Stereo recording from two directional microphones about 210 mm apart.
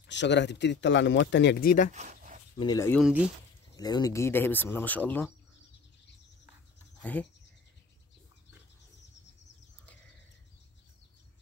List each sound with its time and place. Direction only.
0.0 s speech: 55° left (ahead or behind)
2.0 s a sound: 35° right (ahead or behind)
2.6 s speech: 15° left (ahead or behind)
3.0 s speech: 5° right (ahead or behind)
3.7 s speech: 20° left (ahead or behind)
7.0 s speech: 5° left (ahead or behind)